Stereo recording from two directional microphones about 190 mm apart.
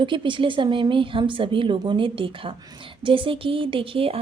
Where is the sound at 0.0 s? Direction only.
25° right (ahead or behind).